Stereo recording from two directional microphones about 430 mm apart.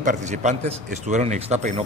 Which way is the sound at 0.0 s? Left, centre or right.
Centre.